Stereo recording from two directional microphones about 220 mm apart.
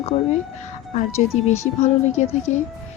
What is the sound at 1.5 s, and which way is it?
Speech, 30° left (ahead or behind).